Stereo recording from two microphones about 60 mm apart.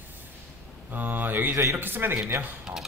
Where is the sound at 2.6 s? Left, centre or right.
Centre.